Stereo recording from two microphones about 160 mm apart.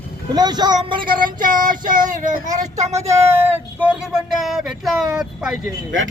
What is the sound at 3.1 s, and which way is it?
Speech, 15° right (ahead or behind).